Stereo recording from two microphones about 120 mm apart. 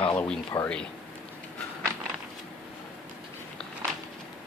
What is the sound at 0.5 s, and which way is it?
Speech, 25° left (ahead or behind).